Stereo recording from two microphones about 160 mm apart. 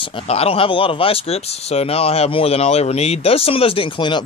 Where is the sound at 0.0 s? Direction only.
35° left (ahead or behind).